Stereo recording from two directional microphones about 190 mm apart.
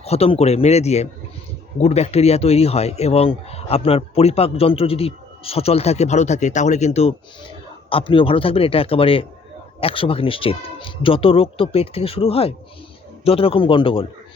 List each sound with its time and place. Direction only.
0.0 s speech: 30° left (ahead or behind)